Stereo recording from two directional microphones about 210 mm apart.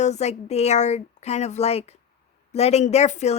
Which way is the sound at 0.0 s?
30° left (ahead or behind).